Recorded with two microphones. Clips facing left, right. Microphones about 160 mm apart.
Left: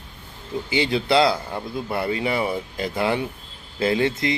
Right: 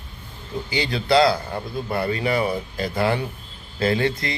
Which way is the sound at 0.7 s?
20° left (ahead or behind).